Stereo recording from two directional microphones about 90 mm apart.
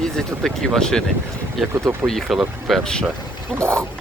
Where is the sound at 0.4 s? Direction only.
5° left (ahead or behind).